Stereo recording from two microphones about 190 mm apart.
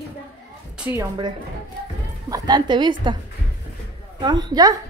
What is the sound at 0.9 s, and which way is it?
Speech, 20° right (ahead or behind).